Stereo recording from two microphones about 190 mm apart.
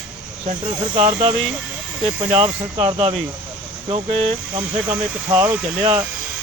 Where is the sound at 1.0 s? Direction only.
30° right (ahead or behind).